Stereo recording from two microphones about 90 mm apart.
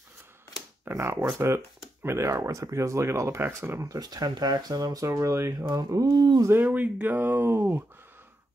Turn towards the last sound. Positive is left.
turn(degrees=-25)  # may be behind; listen again after turning